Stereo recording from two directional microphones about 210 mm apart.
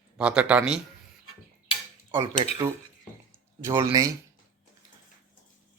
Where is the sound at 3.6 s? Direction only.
10° right (ahead or behind).